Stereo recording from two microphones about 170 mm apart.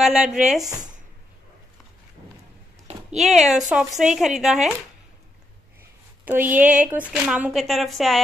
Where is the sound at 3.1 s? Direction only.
Centre (ahead or behind).